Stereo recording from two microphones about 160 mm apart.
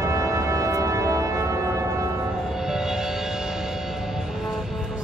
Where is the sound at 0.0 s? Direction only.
20° right (ahead or behind).